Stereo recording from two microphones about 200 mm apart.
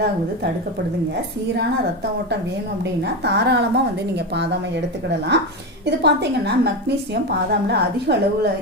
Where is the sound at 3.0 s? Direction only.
55° right (ahead or behind).